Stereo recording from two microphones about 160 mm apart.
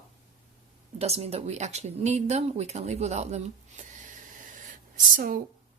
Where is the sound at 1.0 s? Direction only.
40° right (ahead or behind).